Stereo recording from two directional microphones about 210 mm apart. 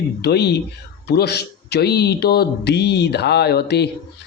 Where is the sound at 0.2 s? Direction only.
50° left (ahead or behind).